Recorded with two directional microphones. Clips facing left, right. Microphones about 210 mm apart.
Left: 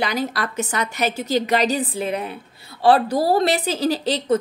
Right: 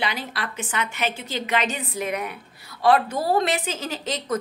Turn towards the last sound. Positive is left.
turn(degrees=30)  # may be behind; listen again after turning